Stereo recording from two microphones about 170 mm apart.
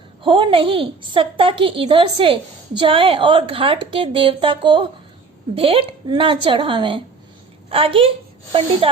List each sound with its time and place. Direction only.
0.2 s a woman's voice: 30° right (ahead or behind)